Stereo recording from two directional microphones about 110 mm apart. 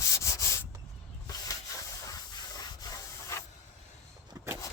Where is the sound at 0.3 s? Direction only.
30° left (ahead or behind).